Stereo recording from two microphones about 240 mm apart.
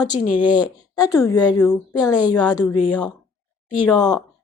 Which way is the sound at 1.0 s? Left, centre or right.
Centre.